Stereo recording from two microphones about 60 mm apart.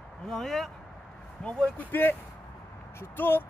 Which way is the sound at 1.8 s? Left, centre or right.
Left.